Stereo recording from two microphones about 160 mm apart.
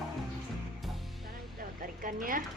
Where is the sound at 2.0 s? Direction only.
60° right (ahead or behind).